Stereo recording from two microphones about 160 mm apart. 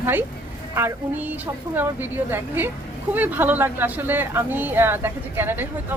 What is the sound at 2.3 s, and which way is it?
A woman's voice, 15° right (ahead or behind).